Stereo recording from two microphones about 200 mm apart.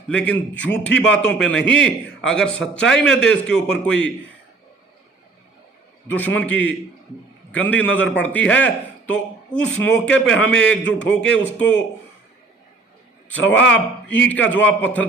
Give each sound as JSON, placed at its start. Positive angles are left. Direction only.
{"t": 0.1, "sound": "a man's voice", "side_deg": 5}
{"t": 6.1, "sound": "a man's voice", "side_deg": 10}
{"t": 11.6, "sound": "speech", "side_deg": 65}
{"t": 13.2, "sound": "a man's voice", "side_deg": 10}